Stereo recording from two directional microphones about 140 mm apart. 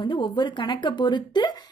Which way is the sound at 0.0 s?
35° left (ahead or behind).